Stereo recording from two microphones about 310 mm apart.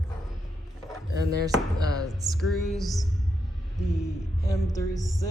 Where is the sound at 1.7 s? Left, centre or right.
Centre.